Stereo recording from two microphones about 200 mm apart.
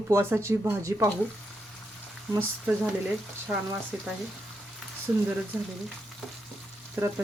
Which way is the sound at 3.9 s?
5° right (ahead or behind).